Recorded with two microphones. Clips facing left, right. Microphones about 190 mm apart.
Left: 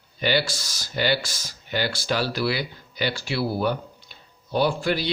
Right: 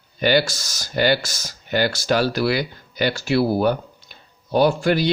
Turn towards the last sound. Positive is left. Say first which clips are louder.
# right 5 dB
turn(degrees=-45)  # may be behind; listen again after turning